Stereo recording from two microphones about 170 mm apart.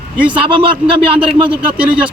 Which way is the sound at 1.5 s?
5° right (ahead or behind).